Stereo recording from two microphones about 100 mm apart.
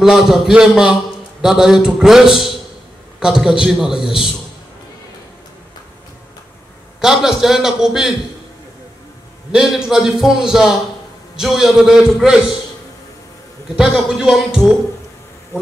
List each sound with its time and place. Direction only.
0.0 s a man's voice: 5° right (ahead or behind)
7.0 s a man's voice: 5° right (ahead or behind)
9.5 s a man's voice: 5° right (ahead or behind)
13.7 s a man's voice: 5° right (ahead or behind)
15.5 s insect: 25° left (ahead or behind)